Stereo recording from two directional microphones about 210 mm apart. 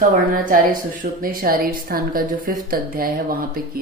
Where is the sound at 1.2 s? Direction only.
45° right (ahead or behind).